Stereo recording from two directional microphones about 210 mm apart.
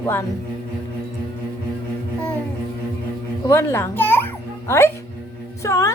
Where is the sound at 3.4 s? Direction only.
10° left (ahead or behind).